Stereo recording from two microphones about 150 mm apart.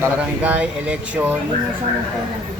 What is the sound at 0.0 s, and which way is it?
Speech, 10° right (ahead or behind).